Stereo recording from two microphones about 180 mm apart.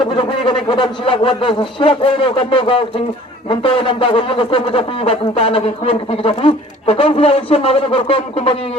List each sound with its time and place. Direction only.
0.0 s speech: 25° left (ahead or behind)